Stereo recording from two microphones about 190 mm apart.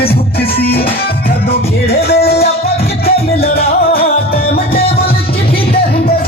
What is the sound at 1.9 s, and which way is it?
Music, 55° left (ahead or behind).